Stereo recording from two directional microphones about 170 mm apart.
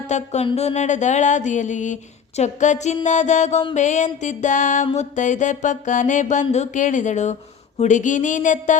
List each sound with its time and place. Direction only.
0.1 s music: 40° left (ahead or behind)